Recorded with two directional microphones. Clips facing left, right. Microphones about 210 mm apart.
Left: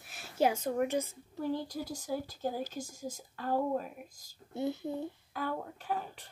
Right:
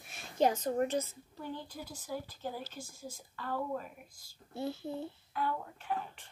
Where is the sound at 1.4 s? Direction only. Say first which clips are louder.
Left 8 dB; 40° left (ahead or behind).